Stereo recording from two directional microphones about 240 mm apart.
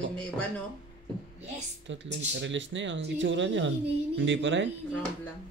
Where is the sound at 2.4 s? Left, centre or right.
Right.